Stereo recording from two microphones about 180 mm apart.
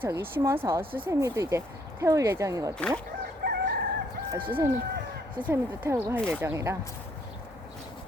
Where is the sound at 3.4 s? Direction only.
65° right (ahead or behind).